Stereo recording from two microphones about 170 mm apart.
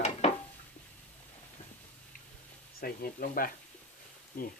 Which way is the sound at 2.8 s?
60° left (ahead or behind).